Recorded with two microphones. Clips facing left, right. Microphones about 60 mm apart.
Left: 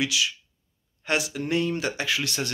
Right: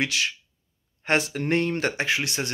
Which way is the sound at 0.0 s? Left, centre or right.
Right.